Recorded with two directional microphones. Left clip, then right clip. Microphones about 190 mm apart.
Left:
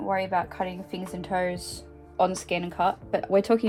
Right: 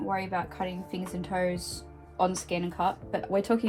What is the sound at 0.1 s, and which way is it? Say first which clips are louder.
Speech: left 7 dB; 50° left (ahead or behind).